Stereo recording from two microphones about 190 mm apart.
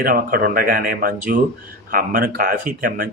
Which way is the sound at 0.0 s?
50° right (ahead or behind).